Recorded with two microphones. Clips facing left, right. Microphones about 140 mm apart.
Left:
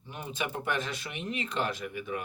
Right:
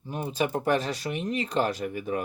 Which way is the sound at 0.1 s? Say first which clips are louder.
Right 8 dB; 40° right (ahead or behind).